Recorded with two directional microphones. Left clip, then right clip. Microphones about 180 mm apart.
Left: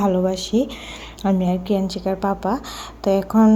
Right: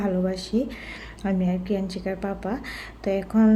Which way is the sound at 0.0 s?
25° left (ahead or behind).